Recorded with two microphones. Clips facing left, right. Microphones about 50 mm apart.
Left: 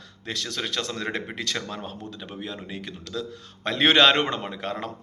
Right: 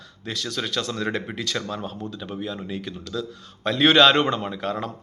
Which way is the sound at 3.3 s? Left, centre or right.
Left.